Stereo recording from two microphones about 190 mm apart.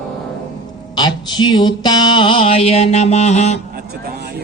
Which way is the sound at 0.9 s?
20° left (ahead or behind).